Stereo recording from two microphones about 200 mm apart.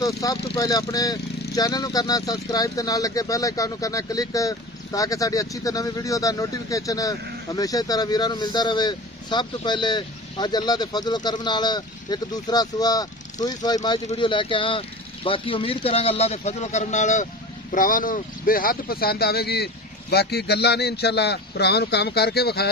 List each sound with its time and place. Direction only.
0.0 s speech: 15° left (ahead or behind); by 22.7 s 55° left (ahead or behind)